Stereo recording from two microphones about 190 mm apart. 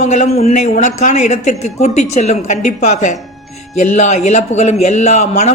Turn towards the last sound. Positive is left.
turn(degrees=35)  # may be behind; listen again after turning